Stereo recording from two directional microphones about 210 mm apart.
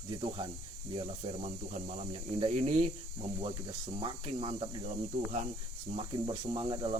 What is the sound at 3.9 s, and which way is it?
Speech, 25° right (ahead or behind).